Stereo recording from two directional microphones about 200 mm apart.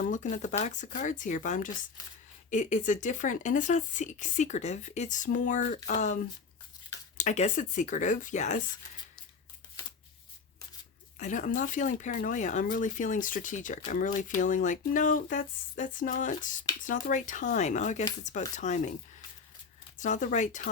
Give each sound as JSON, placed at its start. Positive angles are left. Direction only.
{"t": 0.0, "sound": "speech", "side_deg": 40}
{"t": 7.2, "sound": "speech", "side_deg": 40}
{"t": 11.2, "sound": "speech", "side_deg": 40}
{"t": 20.0, "sound": "speech", "side_deg": 40}